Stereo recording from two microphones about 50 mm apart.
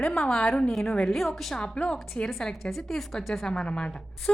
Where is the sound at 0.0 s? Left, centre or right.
Centre.